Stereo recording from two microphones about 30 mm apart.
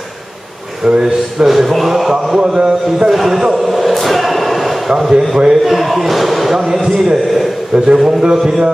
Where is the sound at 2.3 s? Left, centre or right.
Right.